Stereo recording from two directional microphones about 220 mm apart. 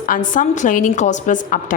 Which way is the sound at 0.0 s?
35° left (ahead or behind).